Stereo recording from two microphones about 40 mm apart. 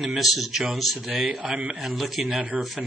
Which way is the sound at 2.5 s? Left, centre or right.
Right.